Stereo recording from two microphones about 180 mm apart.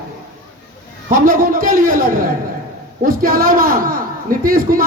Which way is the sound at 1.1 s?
50° right (ahead or behind).